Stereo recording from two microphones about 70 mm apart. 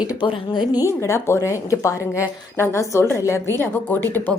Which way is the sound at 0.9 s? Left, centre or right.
Left.